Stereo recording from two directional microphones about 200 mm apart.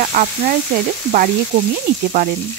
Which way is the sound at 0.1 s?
40° right (ahead or behind).